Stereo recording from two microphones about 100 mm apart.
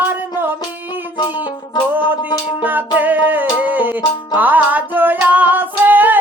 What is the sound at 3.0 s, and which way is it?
Music, 15° right (ahead or behind).